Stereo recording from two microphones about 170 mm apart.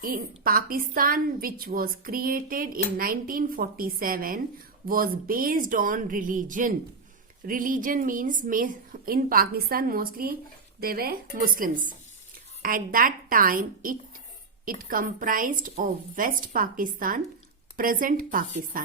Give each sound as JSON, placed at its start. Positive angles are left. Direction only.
{"t": 0.0, "sound": "a woman's voice", "side_deg": -55}